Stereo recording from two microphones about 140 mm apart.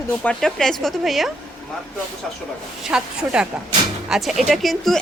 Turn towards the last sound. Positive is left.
turn(degrees=0)  # may be behind; listen again after turning